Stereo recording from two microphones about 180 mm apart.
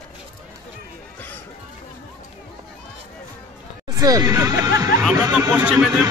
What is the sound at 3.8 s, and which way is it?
Speech, 20° right (ahead or behind).